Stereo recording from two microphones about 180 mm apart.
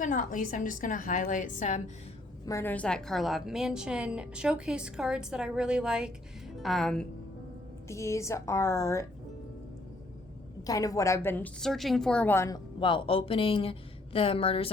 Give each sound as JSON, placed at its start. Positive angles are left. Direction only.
{"t": 0.0, "sound": "a woman's voice", "side_deg": 45}
{"t": 2.5, "sound": "a woman's voice", "side_deg": 15}
{"t": 7.9, "sound": "a woman's voice", "side_deg": 15}
{"t": 10.6, "sound": "a woman's voice", "side_deg": 20}